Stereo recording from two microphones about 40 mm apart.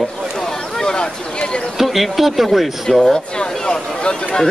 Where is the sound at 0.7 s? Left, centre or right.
Centre.